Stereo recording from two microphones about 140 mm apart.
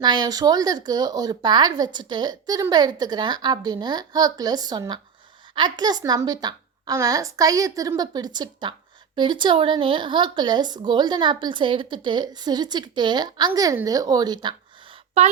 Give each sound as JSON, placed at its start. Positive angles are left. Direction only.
{"t": 0.0, "sound": "speech", "side_deg": -30}
{"t": 15.2, "sound": "speech", "side_deg": -50}